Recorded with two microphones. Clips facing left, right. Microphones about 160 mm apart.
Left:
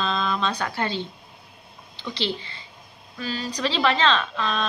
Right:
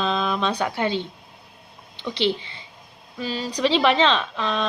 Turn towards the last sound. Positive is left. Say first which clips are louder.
# right 1 dB
turn(degrees=-20)  # may be behind; listen again after turning